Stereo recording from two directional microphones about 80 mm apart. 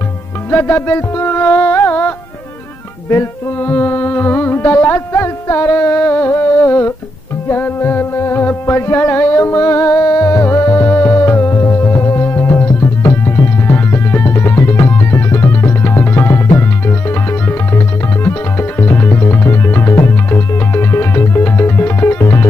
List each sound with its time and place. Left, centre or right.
0.5 s music: left